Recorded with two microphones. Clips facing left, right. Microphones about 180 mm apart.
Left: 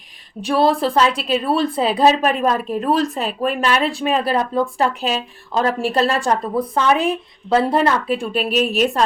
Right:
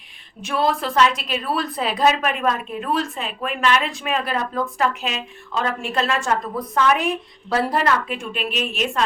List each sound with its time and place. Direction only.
0.4 s a woman's voice: 30° left (ahead or behind)